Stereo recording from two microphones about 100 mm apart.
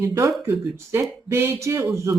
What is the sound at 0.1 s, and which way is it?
Speech, 30° right (ahead or behind).